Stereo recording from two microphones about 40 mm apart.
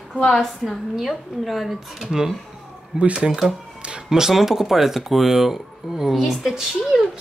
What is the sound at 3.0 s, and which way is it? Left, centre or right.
Speech, right.